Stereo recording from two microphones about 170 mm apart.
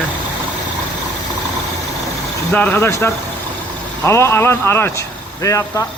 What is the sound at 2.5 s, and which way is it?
Speech, 10° left (ahead or behind).